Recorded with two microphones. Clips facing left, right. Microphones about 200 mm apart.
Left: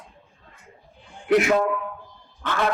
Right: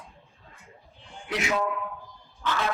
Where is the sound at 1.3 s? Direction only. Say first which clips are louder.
Left 9 dB; 50° left (ahead or behind).